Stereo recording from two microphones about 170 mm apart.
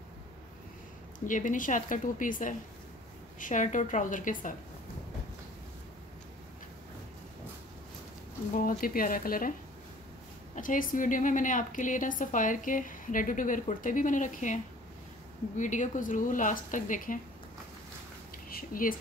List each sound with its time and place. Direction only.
1.2 s a woman's voice: 50° left (ahead or behind)
8.6 s speech: 55° left (ahead or behind)
10.5 s a woman's voice: 50° left (ahead or behind)
18.5 s speech: 55° left (ahead or behind)